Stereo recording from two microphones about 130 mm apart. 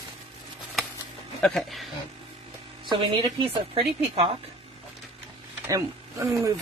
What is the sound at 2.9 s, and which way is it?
Speech, 40° right (ahead or behind).